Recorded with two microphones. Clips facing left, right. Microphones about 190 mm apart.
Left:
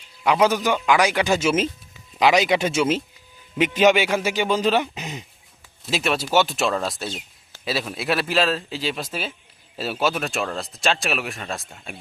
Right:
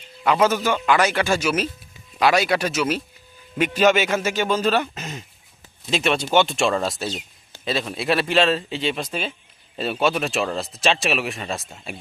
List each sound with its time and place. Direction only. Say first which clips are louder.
0.2 s speech: even; 10° left (ahead or behind)
5.8 s speech: right 2 dB; centre (ahead or behind)